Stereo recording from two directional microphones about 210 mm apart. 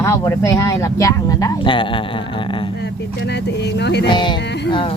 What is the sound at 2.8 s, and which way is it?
Speech, 55° left (ahead or behind).